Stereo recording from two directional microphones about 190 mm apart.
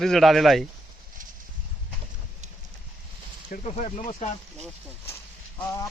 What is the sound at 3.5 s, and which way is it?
Speech, 40° left (ahead or behind).